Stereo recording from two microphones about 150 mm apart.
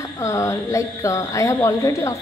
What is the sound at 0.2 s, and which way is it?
A woman's voice, 20° left (ahead or behind).